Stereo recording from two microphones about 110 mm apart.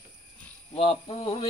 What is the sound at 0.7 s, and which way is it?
Speech, 65° left (ahead or behind).